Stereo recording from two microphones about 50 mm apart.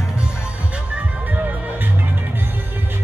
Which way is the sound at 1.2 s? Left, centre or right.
Right.